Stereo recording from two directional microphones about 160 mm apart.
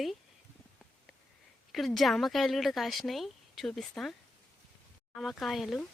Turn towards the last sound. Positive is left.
turn(degrees=0)  # may be behind; listen again after turning